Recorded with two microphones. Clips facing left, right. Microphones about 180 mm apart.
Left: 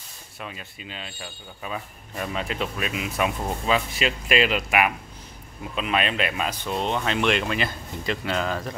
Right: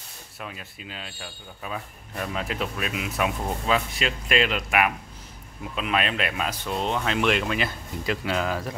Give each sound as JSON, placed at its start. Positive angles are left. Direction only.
{"t": 0.4, "sound": "speech", "side_deg": 0}